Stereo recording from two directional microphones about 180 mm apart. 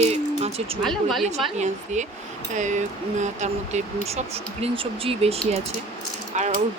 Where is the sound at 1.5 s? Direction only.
40° right (ahead or behind).